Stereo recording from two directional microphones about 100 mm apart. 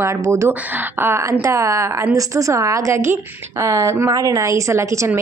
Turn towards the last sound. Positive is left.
turn(degrees=-30)  # may be behind; listen again after turning